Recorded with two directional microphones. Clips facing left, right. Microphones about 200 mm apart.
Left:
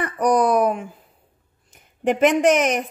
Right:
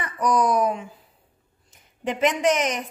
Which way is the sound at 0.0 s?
55° left (ahead or behind).